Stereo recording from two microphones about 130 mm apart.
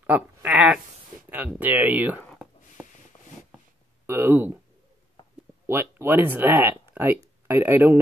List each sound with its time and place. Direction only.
0.0 s speech: 10° right (ahead or behind)
4.0 s speech: 15° right (ahead or behind)
5.7 s speech: 20° right (ahead or behind)